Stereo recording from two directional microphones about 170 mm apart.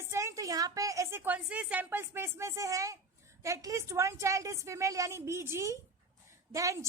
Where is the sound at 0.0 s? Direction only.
15° right (ahead or behind).